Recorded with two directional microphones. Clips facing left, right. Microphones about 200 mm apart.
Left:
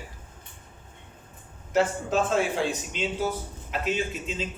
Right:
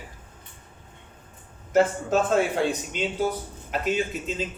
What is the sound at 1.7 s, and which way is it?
Speech, 45° right (ahead or behind).